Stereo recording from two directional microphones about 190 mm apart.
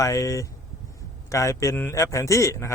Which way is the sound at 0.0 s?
15° left (ahead or behind).